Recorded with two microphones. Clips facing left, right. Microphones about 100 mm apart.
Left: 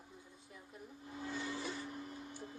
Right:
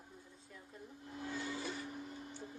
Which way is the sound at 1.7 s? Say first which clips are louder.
Even; centre (ahead or behind).